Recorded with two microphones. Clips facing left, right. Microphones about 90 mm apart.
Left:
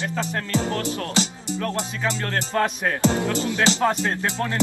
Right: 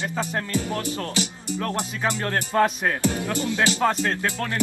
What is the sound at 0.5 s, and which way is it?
Music, 90° left.